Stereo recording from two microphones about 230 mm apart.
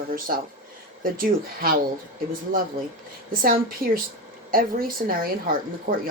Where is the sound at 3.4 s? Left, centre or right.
Right.